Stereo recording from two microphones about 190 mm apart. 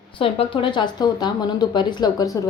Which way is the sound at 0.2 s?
30° left (ahead or behind).